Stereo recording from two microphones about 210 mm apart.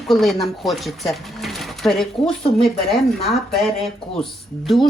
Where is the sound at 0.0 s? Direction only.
Centre (ahead or behind).